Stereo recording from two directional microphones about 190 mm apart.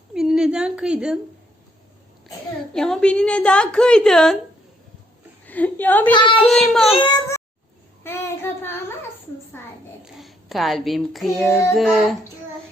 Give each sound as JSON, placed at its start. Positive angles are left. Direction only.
{"t": 0.1, "sound": "a woman's voice", "side_deg": -5}
{"t": 2.7, "sound": "a woman's voice", "side_deg": 5}
{"t": 5.5, "sound": "a woman's voice", "side_deg": 10}
{"t": 6.1, "sound": "speech", "side_deg": 25}
{"t": 6.4, "sound": "a woman's voice", "side_deg": 5}
{"t": 6.9, "sound": "speech", "side_deg": 25}
{"t": 8.0, "sound": "child singing", "side_deg": 10}
{"t": 10.2, "sound": "a child's voice", "side_deg": 0}